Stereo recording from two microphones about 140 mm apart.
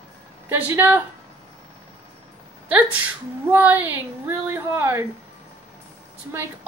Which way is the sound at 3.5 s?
10° right (ahead or behind).